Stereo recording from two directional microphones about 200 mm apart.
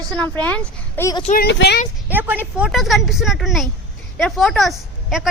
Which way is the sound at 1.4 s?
55° left (ahead or behind).